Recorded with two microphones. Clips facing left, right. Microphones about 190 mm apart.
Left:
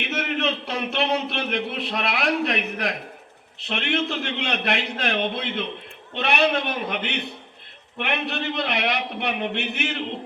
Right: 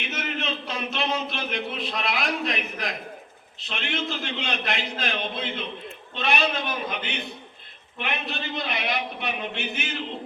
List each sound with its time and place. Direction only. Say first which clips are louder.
0.0 s a man's voice: left 6 dB; 65° left (ahead or behind)